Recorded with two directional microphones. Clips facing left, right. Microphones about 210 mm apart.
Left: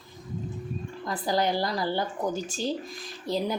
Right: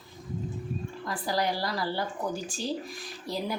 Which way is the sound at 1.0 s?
20° left (ahead or behind).